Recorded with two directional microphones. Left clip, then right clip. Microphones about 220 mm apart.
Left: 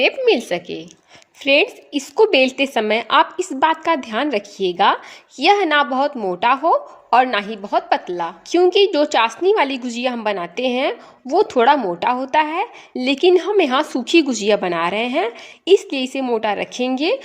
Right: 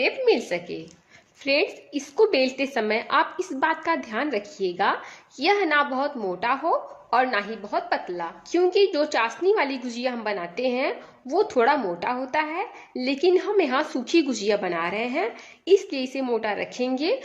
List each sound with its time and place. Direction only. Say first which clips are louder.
0.0 s a woman's voice: left 6 dB; 40° left (ahead or behind)